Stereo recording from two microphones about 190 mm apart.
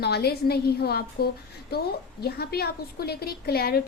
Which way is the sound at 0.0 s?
55° left (ahead or behind).